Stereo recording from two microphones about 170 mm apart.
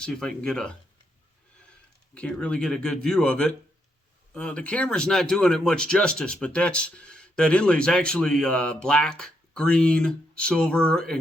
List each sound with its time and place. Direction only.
0.0 s speech: 5° left (ahead or behind)
2.1 s speech: 5° left (ahead or behind)